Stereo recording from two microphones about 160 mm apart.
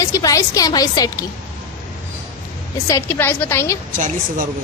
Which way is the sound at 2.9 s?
15° left (ahead or behind).